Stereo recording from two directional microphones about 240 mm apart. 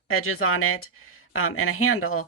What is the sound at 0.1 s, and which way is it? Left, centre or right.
Speech, left.